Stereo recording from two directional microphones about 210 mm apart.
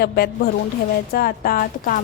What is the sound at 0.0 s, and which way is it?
A woman's voice, 45° left (ahead or behind).